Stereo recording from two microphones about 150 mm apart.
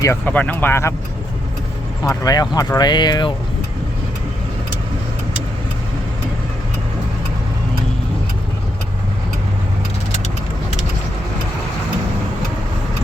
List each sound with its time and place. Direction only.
0.0 s speech: 15° left (ahead or behind)
2.0 s speech: 25° left (ahead or behind)
10.1 s vehicle: 50° left (ahead or behind)